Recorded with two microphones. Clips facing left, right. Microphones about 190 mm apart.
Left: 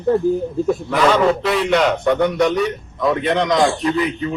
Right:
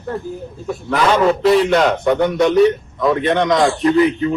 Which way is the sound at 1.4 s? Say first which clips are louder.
Right 6 dB; 35° right (ahead or behind).